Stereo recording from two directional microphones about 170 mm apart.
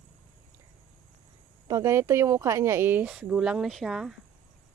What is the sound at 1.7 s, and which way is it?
Speech, 15° right (ahead or behind).